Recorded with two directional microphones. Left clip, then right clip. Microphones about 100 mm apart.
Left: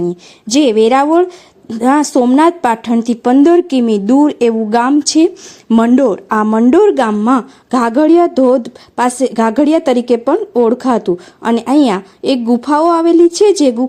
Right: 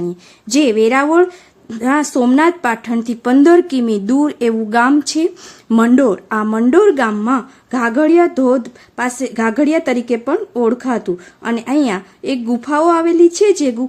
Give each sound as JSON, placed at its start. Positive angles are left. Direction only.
{"t": 0.4, "sound": "speech", "side_deg": 35}
{"t": 3.4, "sound": "a woman's voice", "side_deg": 15}
{"t": 4.4, "sound": "speech", "side_deg": 25}
{"t": 5.0, "sound": "speech", "side_deg": 35}
{"t": 6.0, "sound": "speech", "side_deg": 25}